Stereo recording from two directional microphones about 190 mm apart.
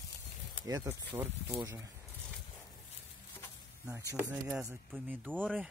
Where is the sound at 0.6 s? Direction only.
15° right (ahead or behind).